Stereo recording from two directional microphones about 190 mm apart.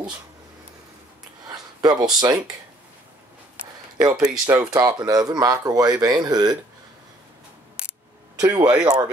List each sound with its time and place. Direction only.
1.5 s a sound: 20° right (ahead or behind)
2.1 s speech: 20° right (ahead or behind)
4.3 s speech: 5° right (ahead or behind)
4.7 s speech: 20° right (ahead or behind)
8.4 s a man's voice: 15° right (ahead or behind)